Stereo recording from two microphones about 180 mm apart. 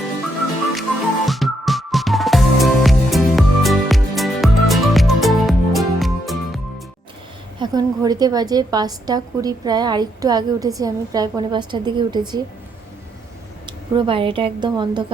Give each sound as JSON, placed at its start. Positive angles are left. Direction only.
{"t": 0.7, "sound": "music", "side_deg": 0}
{"t": 7.6, "sound": "a woman's voice", "side_deg": -20}
{"t": 13.7, "sound": "a woman's voice", "side_deg": -25}